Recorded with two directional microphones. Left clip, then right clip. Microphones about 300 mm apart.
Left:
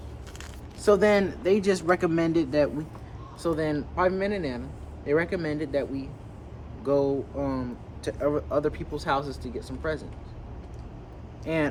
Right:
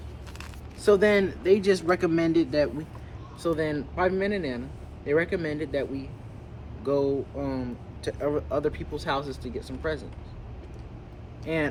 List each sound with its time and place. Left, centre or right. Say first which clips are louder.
0.8 s speech: even; centre
11.4 s speech: left 1 dB; centre